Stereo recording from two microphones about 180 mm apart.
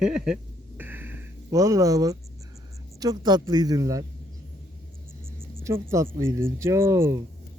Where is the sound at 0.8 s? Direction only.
10° right (ahead or behind).